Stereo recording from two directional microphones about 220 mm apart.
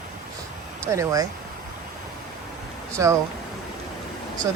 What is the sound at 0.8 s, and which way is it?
Speech, 15° right (ahead or behind).